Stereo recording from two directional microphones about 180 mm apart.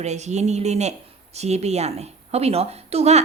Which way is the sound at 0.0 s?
40° right (ahead or behind).